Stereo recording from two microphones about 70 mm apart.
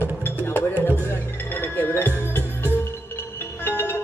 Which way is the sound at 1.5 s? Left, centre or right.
Left.